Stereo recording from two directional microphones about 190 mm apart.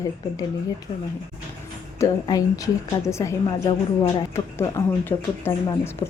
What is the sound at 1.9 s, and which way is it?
Speech, 15° left (ahead or behind).